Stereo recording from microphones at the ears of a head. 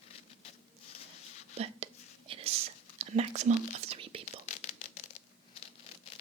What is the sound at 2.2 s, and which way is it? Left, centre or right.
Whispering, right.